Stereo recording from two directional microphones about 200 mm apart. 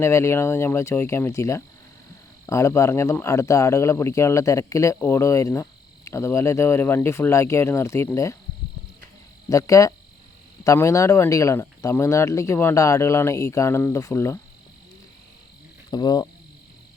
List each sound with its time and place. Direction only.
0.0 s speech: 15° left (ahead or behind)
9.5 s speech: 15° left (ahead or behind)
15.9 s insect: 20° left (ahead or behind)